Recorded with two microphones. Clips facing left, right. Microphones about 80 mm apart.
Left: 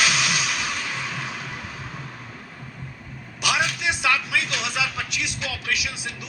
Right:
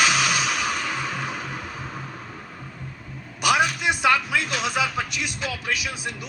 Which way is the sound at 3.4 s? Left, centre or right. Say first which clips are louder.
Right 3 dB; right.